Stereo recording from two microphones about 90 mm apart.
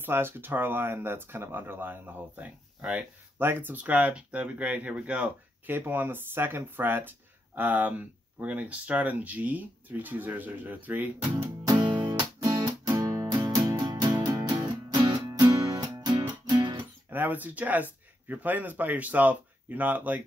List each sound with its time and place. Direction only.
0.0 s speech: 25° right (ahead or behind)
3.3 s speech: 25° right (ahead or behind)
11.6 s music: 55° right (ahead or behind)
17.1 s speech: 20° right (ahead or behind)